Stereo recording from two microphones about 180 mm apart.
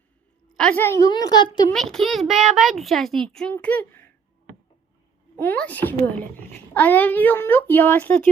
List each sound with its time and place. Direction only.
0.5 s a woman's voice: 5° left (ahead or behind); by 1.7 s 25° left (ahead or behind)
1.7 s a child's voice: centre (ahead or behind)
5.4 s a child's voice: 10° left (ahead or behind)